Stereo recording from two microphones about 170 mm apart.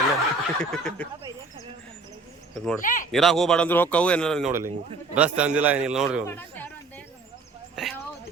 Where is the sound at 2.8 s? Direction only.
50° left (ahead or behind).